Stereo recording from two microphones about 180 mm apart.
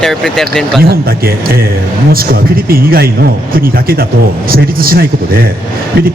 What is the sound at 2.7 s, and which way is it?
Speech, 55° right (ahead or behind).